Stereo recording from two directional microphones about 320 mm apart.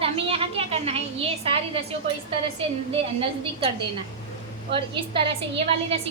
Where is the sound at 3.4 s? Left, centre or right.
Centre.